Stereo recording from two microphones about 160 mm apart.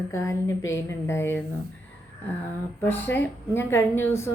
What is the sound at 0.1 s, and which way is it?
A woman's voice, 20° left (ahead or behind).